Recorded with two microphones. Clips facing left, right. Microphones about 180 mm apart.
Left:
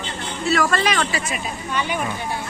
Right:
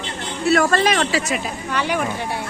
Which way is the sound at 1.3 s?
80° right.